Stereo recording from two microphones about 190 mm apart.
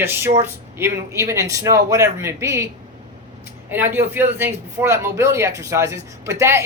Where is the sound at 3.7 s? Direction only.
10° right (ahead or behind).